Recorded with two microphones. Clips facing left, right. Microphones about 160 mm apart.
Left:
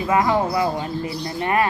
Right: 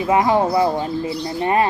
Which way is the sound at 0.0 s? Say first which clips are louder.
Right 3 dB; 20° right (ahead or behind).